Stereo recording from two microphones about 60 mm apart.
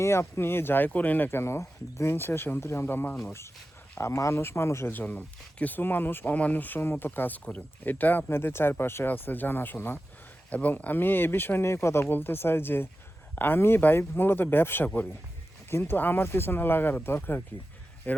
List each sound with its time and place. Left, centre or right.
0.0 s speech: left
2.8 s speech: left
4.9 s speech: left
10.5 s speech: left
12.0 s speech: left